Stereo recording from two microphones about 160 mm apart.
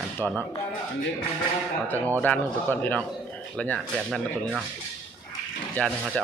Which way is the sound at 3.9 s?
5° right (ahead or behind).